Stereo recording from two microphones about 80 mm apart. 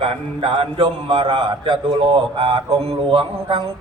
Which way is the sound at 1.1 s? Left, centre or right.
Right.